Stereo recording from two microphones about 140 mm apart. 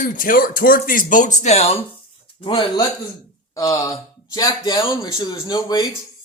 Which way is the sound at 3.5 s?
25° left (ahead or behind).